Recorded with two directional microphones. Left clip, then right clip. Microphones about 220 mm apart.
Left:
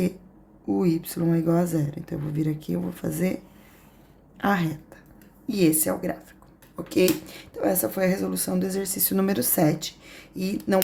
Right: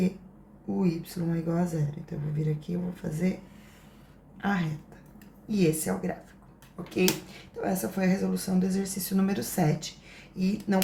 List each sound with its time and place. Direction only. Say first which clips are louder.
0.8 s speech: left 6 dB; 50° left (ahead or behind)
4.4 s a woman's voice: left 7 dB; 55° left (ahead or behind)
7.3 s speech: left 7 dB; 50° left (ahead or behind)